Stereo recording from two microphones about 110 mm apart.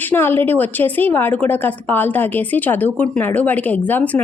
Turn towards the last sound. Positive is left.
turn(degrees=15)  # may be behind; listen again after turning